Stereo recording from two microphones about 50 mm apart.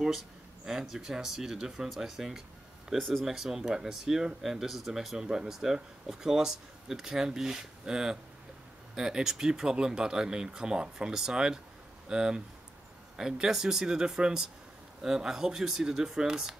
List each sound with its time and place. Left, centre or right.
0.7 s speech: centre
3.0 s speech: centre
3.3 s speech: centre
5.1 s speech: centre